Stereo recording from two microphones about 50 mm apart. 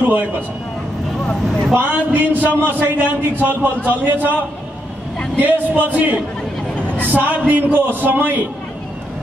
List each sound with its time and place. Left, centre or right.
0.0 s a man's voice: right
1.7 s a man's voice: right
5.4 s a man's voice: right
7.2 s a man's voice: right